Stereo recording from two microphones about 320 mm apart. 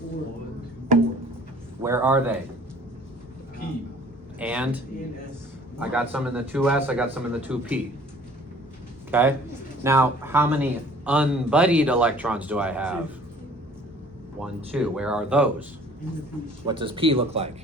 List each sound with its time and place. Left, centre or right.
1.8 s speech: centre
4.4 s a man's voice: centre
5.8 s a man's voice: centre
9.0 s a man's voice: centre
14.4 s a man's voice: centre
16.6 s speech: centre